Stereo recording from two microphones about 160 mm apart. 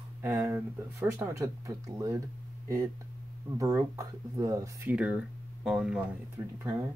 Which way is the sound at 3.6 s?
20° right (ahead or behind).